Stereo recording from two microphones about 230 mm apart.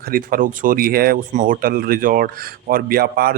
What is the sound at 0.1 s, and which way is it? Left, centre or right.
Speech, right.